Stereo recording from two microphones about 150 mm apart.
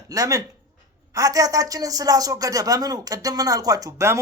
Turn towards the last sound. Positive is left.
turn(degrees=-20)  # may be behind; listen again after turning